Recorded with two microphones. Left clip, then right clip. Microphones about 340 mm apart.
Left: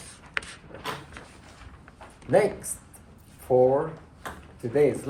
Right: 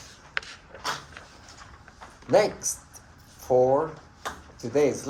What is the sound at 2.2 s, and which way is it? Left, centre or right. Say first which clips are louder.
Speech: right 1 dB; centre.